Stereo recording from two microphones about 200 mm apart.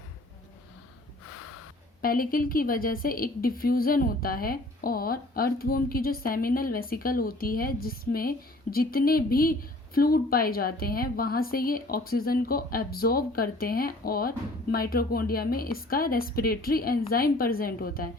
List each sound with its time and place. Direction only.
2.0 s a woman's voice: 45° left (ahead or behind)